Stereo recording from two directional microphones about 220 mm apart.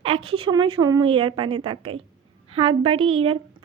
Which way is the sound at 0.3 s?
25° right (ahead or behind).